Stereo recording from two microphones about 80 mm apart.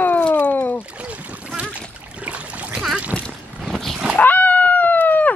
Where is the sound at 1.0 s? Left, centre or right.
Centre.